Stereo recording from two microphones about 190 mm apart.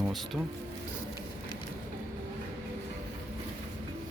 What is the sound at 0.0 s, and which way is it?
Music, centre (ahead or behind).